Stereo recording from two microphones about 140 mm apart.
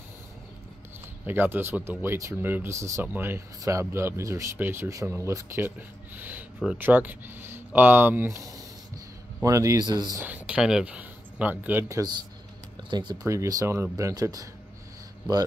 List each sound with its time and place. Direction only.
1.2 s speech: 15° right (ahead or behind)
10.2 s speech: 10° right (ahead or behind)
12.9 s speech: 30° right (ahead or behind)